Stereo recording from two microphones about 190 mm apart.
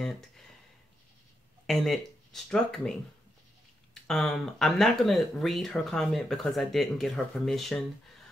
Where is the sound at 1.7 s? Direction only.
Centre (ahead or behind).